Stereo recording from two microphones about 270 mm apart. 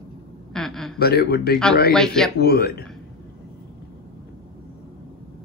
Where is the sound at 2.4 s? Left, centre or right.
Left.